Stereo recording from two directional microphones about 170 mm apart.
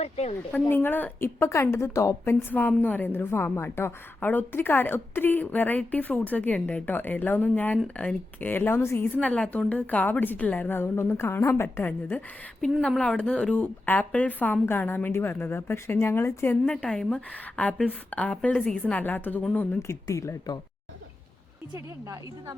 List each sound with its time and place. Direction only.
0.0 s speech: 40° left (ahead or behind)
0.7 s a woman's voice: 10° left (ahead or behind)
22.0 s speech: 20° right (ahead or behind)